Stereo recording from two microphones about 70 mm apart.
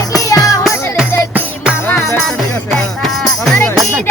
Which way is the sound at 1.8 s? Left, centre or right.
Left.